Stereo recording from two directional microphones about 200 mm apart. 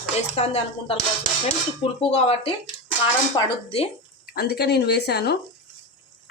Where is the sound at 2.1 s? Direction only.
30° left (ahead or behind).